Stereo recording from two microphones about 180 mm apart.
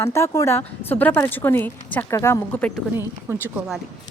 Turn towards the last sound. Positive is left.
turn(degrees=-10)  # may be behind; listen again after turning